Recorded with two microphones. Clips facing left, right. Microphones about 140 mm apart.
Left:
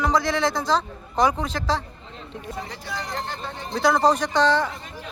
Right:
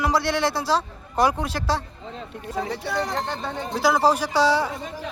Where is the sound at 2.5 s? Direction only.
90° right.